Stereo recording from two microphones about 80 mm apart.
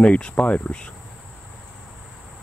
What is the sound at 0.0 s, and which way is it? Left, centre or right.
Speech, centre.